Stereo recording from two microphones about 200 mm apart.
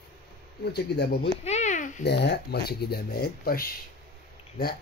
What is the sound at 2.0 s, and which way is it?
Speech, 55° left (ahead or behind).